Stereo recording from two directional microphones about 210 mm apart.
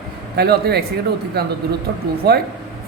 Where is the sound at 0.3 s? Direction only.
50° right (ahead or behind).